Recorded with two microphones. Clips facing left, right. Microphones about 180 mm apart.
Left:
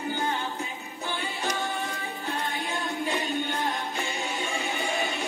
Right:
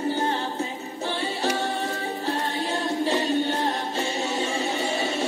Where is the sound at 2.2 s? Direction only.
35° right (ahead or behind).